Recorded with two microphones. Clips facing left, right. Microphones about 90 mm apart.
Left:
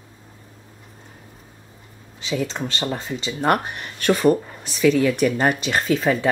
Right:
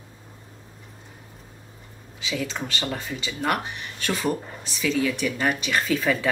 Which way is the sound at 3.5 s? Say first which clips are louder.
Left 7 dB; 50° left (ahead or behind).